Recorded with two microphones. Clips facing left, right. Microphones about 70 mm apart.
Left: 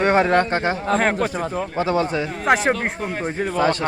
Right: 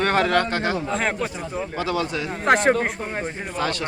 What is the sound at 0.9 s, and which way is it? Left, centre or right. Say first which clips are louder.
Speech: left 5 dB; left.